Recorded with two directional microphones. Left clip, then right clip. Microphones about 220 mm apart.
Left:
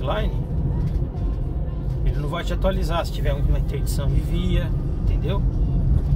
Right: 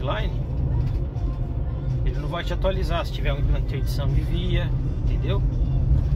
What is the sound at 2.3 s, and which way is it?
Speech, 20° left (ahead or behind).